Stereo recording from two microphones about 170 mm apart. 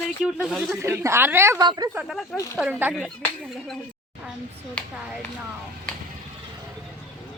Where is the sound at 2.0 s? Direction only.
Centre (ahead or behind).